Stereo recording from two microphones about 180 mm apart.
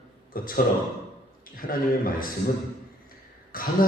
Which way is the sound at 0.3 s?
55° left (ahead or behind).